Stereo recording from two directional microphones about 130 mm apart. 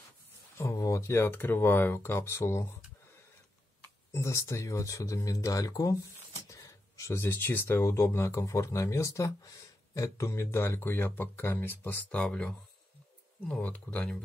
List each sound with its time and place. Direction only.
0.6 s speech: 25° left (ahead or behind)
4.1 s speech: 25° left (ahead or behind)